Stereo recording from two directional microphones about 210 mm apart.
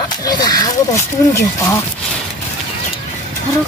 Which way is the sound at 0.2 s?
20° left (ahead or behind).